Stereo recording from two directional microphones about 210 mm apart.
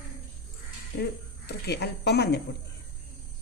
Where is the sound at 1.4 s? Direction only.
50° left (ahead or behind).